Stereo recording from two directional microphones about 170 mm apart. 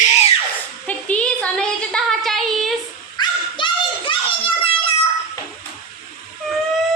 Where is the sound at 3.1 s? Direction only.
30° left (ahead or behind).